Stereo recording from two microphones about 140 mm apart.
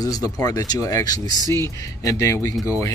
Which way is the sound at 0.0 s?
25° left (ahead or behind).